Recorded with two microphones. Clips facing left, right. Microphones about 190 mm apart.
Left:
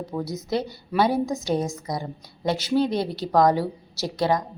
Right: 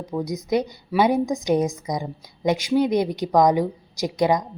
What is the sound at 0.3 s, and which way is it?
A woman's voice, 15° right (ahead or behind).